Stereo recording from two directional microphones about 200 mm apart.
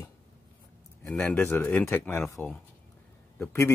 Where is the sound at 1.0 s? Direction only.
5° left (ahead or behind).